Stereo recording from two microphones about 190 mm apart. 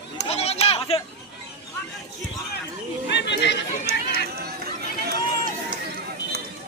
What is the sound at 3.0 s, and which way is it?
Speech, 65° left (ahead or behind).